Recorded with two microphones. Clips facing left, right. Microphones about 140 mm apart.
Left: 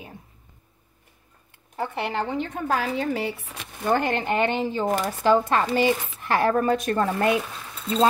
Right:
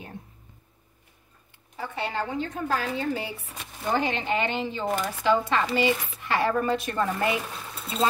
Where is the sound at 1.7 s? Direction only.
60° left (ahead or behind); by 7.0 s 45° left (ahead or behind).